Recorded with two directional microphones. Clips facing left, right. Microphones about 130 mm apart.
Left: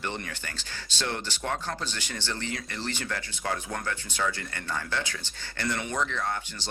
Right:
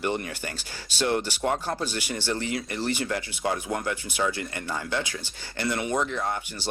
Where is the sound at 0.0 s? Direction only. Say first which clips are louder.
Right 6 dB; 15° right (ahead or behind).